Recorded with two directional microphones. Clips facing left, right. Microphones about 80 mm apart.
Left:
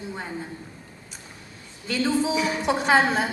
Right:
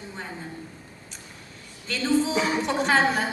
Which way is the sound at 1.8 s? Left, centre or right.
Centre.